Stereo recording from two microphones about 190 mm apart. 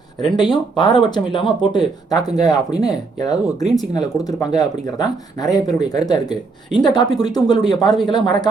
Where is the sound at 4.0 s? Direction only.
20° left (ahead or behind).